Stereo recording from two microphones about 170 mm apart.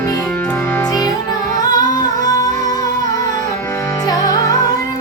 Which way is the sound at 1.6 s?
25° left (ahead or behind).